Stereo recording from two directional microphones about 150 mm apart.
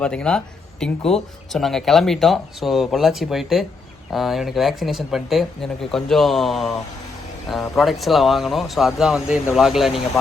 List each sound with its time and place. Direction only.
0.0 s speech: 5° left (ahead or behind)